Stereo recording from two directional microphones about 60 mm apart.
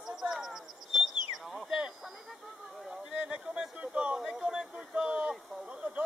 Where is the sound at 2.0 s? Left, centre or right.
Centre.